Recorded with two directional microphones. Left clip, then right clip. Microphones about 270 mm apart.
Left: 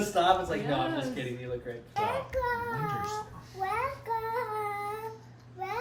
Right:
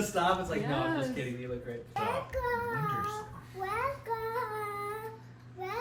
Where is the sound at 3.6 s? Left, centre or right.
Centre.